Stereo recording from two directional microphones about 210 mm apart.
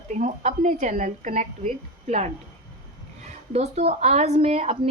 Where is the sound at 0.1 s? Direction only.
35° right (ahead or behind).